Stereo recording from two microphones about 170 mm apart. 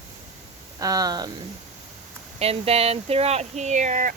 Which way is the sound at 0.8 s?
20° right (ahead or behind).